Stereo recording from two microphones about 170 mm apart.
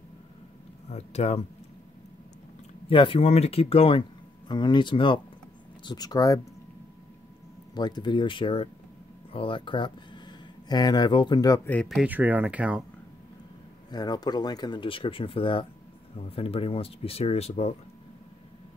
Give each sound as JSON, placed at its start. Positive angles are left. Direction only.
{"t": 0.8, "sound": "speech", "side_deg": 40}
{"t": 2.9, "sound": "speech", "side_deg": 30}
{"t": 7.7, "sound": "speech", "side_deg": 25}
{"t": 11.7, "sound": "speech", "side_deg": 5}
{"t": 12.0, "sound": "speech", "side_deg": -10}
{"t": 13.8, "sound": "speech", "side_deg": 25}